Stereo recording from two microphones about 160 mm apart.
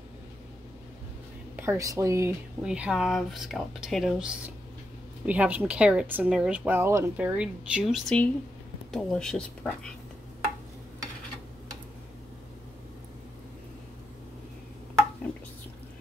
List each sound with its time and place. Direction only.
1.6 s a woman's voice: 20° right (ahead or behind)
2.6 s speech: 5° right (ahead or behind)